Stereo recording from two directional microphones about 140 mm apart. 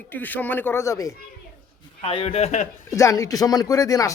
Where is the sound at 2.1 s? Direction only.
40° left (ahead or behind).